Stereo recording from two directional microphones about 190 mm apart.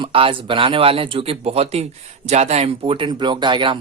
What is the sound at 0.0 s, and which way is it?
Speech, 30° right (ahead or behind).